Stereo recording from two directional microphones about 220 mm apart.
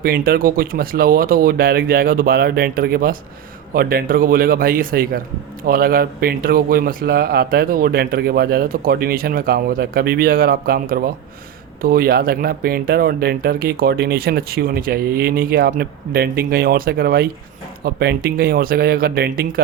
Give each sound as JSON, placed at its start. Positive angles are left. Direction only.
{"t": 0.0, "sound": "speech", "side_deg": -40}